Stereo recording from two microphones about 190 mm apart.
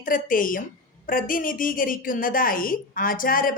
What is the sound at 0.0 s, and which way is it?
A woman's voice, 45° left (ahead or behind).